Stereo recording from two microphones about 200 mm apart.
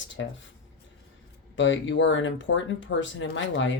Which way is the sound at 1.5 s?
65° left (ahead or behind).